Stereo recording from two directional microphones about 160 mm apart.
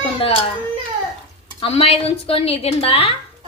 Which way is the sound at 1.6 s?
35° left (ahead or behind).